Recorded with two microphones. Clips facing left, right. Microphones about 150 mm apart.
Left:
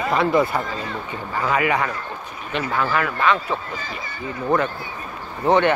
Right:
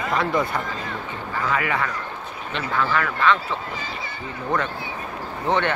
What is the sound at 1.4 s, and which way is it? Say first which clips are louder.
Speech: left 4 dB; 15° left (ahead or behind).